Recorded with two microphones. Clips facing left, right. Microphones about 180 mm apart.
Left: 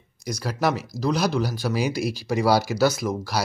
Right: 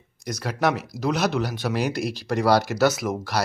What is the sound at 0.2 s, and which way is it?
Speech, centre (ahead or behind).